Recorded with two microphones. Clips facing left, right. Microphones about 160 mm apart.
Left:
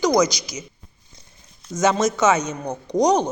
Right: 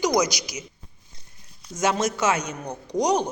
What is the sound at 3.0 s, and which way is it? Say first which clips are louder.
Speech: left 4 dB; 10° right (ahead or behind).